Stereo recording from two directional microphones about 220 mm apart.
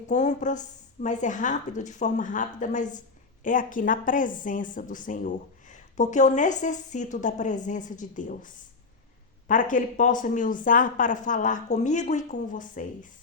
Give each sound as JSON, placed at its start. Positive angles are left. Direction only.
{"t": 0.1, "sound": "speech", "side_deg": 35}